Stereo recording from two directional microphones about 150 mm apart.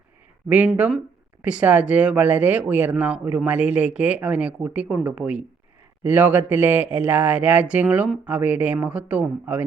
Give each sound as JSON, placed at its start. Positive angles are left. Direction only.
{"t": 0.4, "sound": "speech", "side_deg": -10}